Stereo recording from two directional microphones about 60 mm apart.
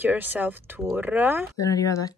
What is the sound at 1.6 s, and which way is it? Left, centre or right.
Speech, left.